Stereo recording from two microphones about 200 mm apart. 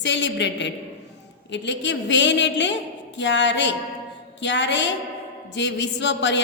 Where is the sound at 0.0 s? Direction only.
65° left (ahead or behind).